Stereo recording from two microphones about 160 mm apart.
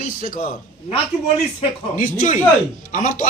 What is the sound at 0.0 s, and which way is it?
Speech, 60° left (ahead or behind).